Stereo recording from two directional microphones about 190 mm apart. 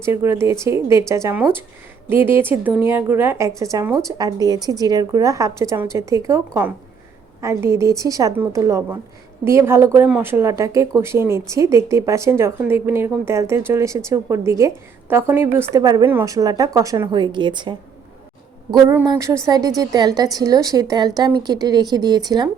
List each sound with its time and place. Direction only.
0.0 s a woman's voice: 15° right (ahead or behind)